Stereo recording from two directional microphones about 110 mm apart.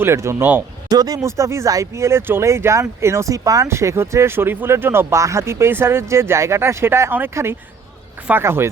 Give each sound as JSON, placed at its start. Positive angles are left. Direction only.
{"t": 0.0, "sound": "speech", "side_deg": -25}
{"t": 0.9, "sound": "speech", "side_deg": -35}